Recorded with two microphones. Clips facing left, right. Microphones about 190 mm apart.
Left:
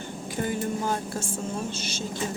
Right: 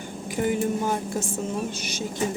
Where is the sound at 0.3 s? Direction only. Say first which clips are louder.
Right 4 dB; 15° right (ahead or behind).